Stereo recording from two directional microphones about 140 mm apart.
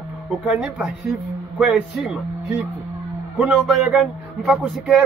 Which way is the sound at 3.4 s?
5° right (ahead or behind).